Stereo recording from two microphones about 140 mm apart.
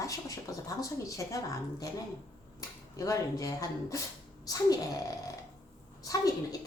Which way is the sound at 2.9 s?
25° left (ahead or behind).